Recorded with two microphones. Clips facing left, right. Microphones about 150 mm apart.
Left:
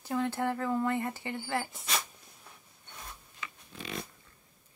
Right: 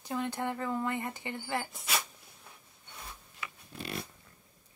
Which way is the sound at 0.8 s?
15° right (ahead or behind).